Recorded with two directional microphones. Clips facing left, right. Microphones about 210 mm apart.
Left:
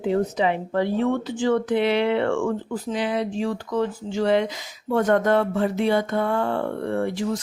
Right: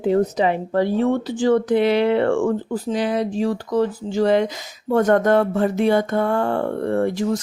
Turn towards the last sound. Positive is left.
turn(degrees=-45)  # may be behind; listen again after turning